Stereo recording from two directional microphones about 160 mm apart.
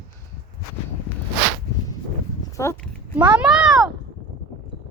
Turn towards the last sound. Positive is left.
turn(degrees=0)  # may be behind; listen again after turning